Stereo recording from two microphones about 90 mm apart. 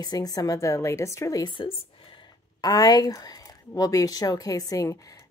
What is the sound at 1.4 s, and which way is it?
Speech, 65° left (ahead or behind).